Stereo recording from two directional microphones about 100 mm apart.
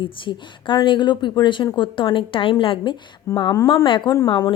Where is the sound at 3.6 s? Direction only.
55° left (ahead or behind).